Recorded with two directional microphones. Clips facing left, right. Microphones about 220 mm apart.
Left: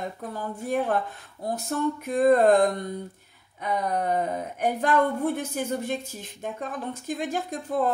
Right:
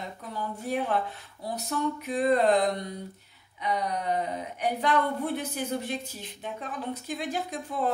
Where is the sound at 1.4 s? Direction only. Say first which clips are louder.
Left 3 dB; 50° left (ahead or behind).